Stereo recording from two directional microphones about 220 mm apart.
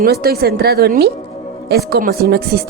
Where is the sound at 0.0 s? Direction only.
45° right (ahead or behind).